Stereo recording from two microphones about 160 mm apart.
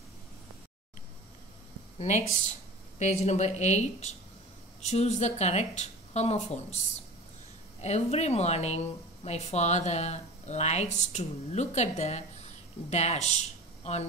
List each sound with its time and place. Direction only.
2.0 s speech: 45° left (ahead or behind)
7.8 s speech: 45° left (ahead or behind)